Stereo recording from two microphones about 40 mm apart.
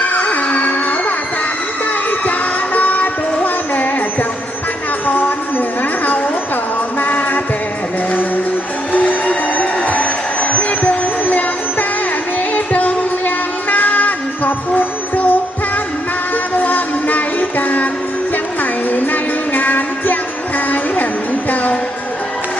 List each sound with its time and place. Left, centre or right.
0.0 s music: left
2.7 s music: left
5.0 s music: left
7.0 s music: left
8.9 s train: left
12.5 s music: left